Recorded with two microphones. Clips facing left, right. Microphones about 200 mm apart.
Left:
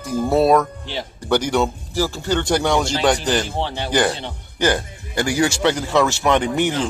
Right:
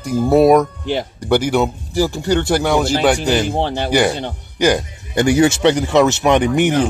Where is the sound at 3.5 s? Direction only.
50° right (ahead or behind).